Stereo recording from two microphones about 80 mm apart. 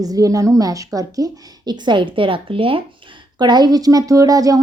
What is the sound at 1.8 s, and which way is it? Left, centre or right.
Speech, right.